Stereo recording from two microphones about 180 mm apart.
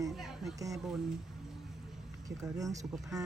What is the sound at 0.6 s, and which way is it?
Livestock, 20° right (ahead or behind).